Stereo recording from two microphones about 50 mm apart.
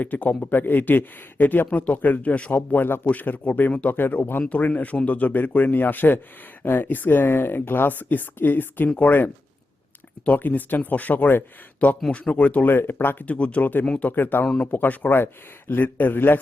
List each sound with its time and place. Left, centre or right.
0.0 s speech: left
2.6 s speech: left
3.9 s speech: left
4.4 s speech: left
12.6 s speech: left
13.2 s speech: left
14.1 s speech: left